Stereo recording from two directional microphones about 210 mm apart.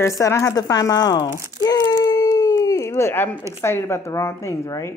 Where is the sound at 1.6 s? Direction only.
15° left (ahead or behind).